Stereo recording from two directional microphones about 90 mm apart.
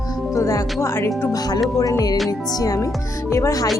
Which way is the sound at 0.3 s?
35° left (ahead or behind).